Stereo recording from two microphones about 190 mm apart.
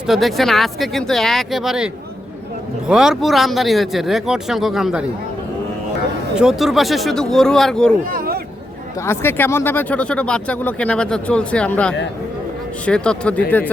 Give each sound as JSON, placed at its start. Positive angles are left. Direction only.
{"t": 0.1, "sound": "speech", "side_deg": 0}
{"t": 6.3, "sound": "speech", "side_deg": -5}
{"t": 8.1, "sound": "a sound", "side_deg": -50}
{"t": 9.0, "sound": "speech", "side_deg": 10}